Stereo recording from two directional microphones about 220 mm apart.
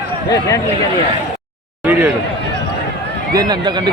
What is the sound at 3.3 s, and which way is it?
Speech, 20° right (ahead or behind).